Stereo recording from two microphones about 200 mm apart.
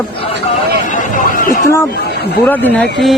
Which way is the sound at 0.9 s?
40° left (ahead or behind).